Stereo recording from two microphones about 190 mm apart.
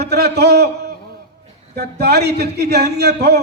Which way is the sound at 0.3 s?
60° right (ahead or behind).